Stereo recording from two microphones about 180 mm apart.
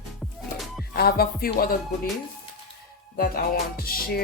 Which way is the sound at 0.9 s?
60° left (ahead or behind).